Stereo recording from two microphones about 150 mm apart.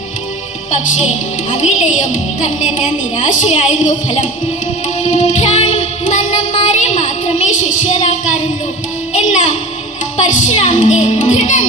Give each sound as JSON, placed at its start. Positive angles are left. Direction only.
{"t": 1.5, "sound": "music", "side_deg": 55}
{"t": 6.7, "sound": "child singing", "side_deg": 50}
{"t": 9.1, "sound": "a sound", "side_deg": 50}
{"t": 10.2, "sound": "music", "side_deg": 55}